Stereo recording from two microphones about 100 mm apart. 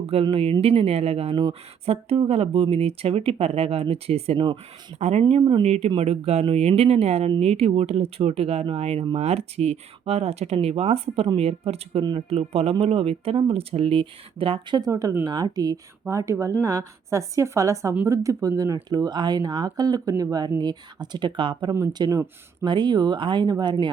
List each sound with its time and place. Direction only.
0.0 s speech: 75° right (ahead or behind)
7.3 s speech: 75° right (ahead or behind)
8.6 s speech: 80° right
12.8 s speech: 75° right (ahead or behind)
14.8 s speech: 35° right (ahead or behind); by 21.7 s 55° right (ahead or behind)
21.9 s speech: 45° right (ahead or behind)